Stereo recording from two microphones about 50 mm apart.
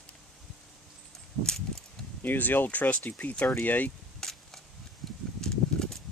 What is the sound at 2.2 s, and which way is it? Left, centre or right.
Speech, left.